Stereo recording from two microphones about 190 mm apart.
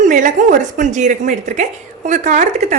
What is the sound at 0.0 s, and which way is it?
A woman's voice, 40° right (ahead or behind).